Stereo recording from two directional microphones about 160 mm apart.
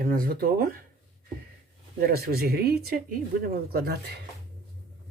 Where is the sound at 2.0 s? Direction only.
75° right (ahead or behind).